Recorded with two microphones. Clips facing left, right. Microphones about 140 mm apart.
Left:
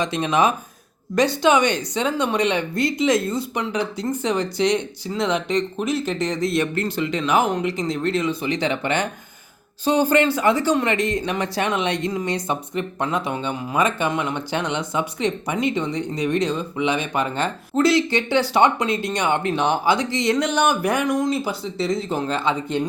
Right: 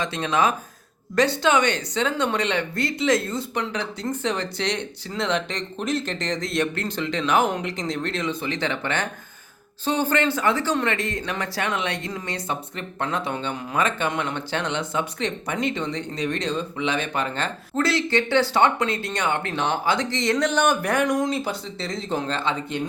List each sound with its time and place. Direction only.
0.0 s a woman's voice: 15° left (ahead or behind)